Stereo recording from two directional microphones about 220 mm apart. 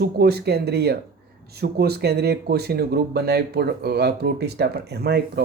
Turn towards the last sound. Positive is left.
turn(degrees=-50)  # may be behind; listen again after turning